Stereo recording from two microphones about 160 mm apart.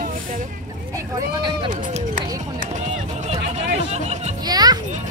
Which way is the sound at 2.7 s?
45° right (ahead or behind).